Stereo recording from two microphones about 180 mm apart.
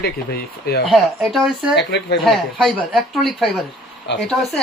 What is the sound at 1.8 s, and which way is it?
Speech, 70° left (ahead or behind).